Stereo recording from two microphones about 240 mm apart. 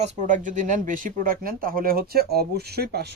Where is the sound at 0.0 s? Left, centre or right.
Right.